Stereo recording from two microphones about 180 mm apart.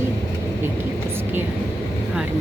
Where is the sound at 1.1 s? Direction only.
10° right (ahead or behind).